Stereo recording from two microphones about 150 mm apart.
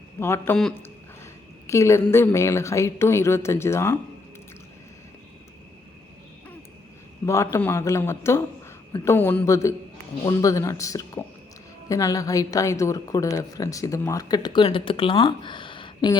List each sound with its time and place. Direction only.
0.2 s a man's voice: 15° left (ahead or behind)
7.3 s a man's voice: 20° left (ahead or behind)